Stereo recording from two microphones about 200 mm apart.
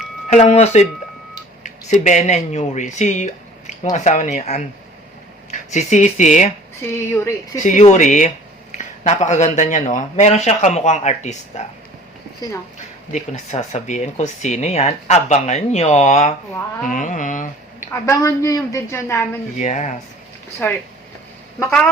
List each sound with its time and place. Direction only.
0.3 s speech: 35° left (ahead or behind)
6.9 s a woman's voice: 10° left (ahead or behind)
7.6 s speech: 35° left (ahead or behind)
13.3 s speech: 35° left (ahead or behind)
17.9 s a woman's voice: 15° left (ahead or behind)
19.5 s speech: 35° left (ahead or behind)
20.6 s a woman's voice: 10° left (ahead or behind)